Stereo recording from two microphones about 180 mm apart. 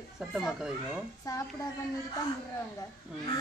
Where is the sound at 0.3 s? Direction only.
Centre (ahead or behind).